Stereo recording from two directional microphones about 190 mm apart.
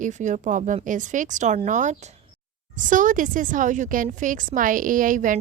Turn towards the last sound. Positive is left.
turn(degrees=-45)  # may be behind; listen again after turning